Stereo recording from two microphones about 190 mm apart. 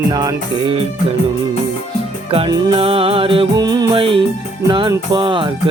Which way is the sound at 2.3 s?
25° right (ahead or behind).